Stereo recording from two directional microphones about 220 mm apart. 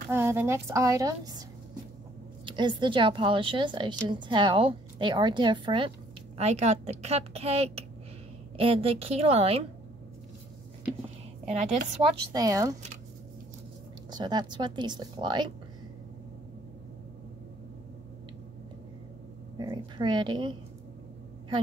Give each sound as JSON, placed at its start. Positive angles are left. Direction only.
{"t": 0.1, "sound": "speech", "side_deg": -10}
{"t": 2.4, "sound": "a woman's voice", "side_deg": -20}
{"t": 11.4, "sound": "a woman's voice", "side_deg": -30}
{"t": 12.3, "sound": "speech", "side_deg": -15}
{"t": 14.1, "sound": "a woman's voice", "side_deg": -20}
{"t": 19.6, "sound": "a woman's voice", "side_deg": -20}